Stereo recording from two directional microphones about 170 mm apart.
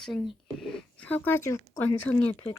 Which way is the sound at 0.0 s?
Centre (ahead or behind).